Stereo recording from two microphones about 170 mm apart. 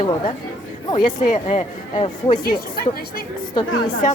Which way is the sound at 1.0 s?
40° left (ahead or behind).